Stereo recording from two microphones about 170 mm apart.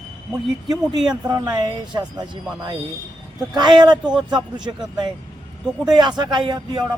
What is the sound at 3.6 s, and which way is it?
Speech, 25° right (ahead or behind).